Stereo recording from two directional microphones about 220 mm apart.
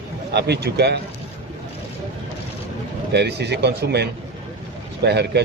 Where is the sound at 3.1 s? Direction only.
50° right (ahead or behind).